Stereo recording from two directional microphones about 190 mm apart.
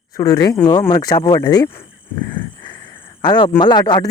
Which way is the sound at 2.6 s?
25° left (ahead or behind).